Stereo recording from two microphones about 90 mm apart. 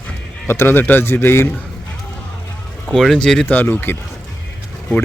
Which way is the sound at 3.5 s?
20° left (ahead or behind).